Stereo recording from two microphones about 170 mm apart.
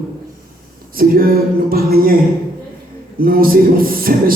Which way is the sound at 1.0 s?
60° right (ahead or behind).